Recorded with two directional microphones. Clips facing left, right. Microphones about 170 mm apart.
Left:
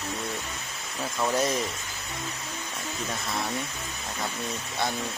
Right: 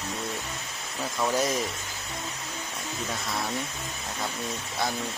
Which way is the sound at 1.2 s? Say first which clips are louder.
Even; centre (ahead or behind).